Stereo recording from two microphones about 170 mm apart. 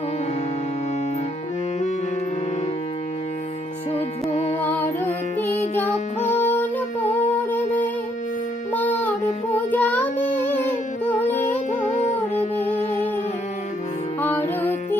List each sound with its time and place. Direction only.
3.9 s music: 40° left (ahead or behind)
4.6 s music: 10° left (ahead or behind)
9.5 s child singing: 10° left (ahead or behind)
11.0 s music: 10° left (ahead or behind)
11.4 s music: 45° left (ahead or behind)
14.2 s music: 10° left (ahead or behind)